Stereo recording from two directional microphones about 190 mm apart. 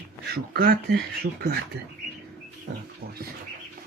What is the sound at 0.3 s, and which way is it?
Speech, 50° right (ahead or behind).